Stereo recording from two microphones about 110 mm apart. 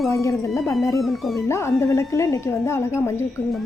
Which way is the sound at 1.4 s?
25° left (ahead or behind).